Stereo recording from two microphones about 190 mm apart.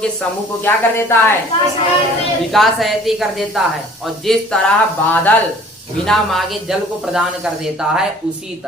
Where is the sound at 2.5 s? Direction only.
Centre (ahead or behind).